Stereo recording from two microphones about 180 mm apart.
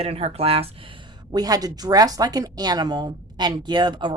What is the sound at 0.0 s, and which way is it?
Speech, 35° right (ahead or behind).